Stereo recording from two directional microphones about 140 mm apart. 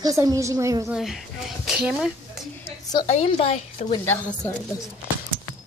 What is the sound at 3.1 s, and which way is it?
Speech, 50° left (ahead or behind).